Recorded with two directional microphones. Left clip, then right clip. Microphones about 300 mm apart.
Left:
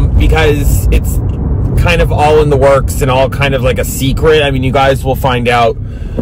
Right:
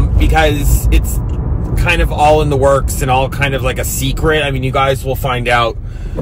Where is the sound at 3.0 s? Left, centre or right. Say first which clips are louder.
Left 3 dB; centre.